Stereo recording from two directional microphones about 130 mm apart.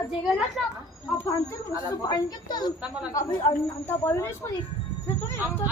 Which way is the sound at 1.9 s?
30° left (ahead or behind).